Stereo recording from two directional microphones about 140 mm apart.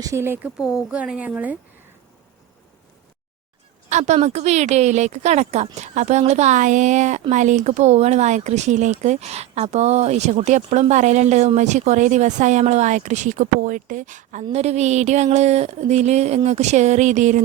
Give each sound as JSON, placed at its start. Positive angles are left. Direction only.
{"t": 0.0, "sound": "speech", "side_deg": -20}
{"t": 0.6, "sound": "a woman's voice", "side_deg": -5}
{"t": 3.8, "sound": "speech", "side_deg": -55}
{"t": 14.5, "sound": "speech", "side_deg": -50}